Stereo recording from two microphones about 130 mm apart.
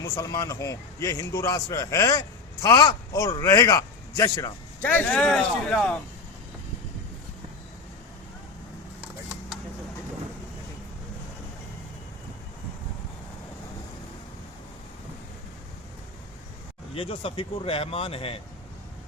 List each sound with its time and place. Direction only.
0.0 s a man's voice: 25° left (ahead or behind)
4.8 s speech: 15° left (ahead or behind)
16.9 s speech: 45° left (ahead or behind)